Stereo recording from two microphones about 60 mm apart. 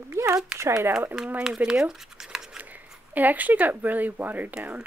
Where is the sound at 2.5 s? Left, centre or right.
Right.